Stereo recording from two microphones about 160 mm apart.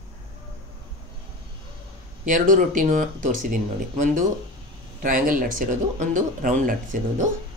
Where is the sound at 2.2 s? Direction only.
55° right (ahead or behind).